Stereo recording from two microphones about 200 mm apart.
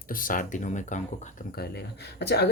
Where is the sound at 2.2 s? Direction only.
55° left (ahead or behind).